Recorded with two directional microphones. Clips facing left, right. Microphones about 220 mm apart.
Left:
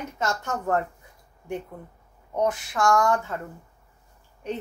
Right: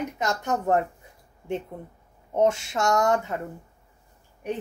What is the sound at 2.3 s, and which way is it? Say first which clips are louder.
Speech: right 3 dB; 25° right (ahead or behind).